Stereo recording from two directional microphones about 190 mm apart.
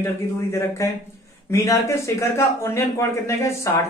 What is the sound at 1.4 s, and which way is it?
Speech, 15° left (ahead or behind).